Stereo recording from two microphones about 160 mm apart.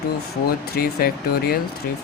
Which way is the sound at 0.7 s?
70° left (ahead or behind).